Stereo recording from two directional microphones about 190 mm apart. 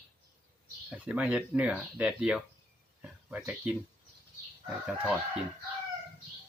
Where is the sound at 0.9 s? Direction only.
5° right (ahead or behind).